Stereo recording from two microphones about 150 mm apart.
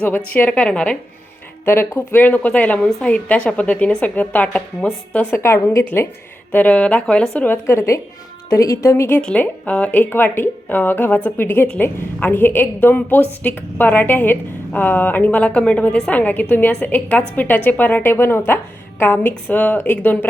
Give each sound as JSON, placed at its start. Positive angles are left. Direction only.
{"t": 0.0, "sound": "a woman's voice", "side_deg": 10}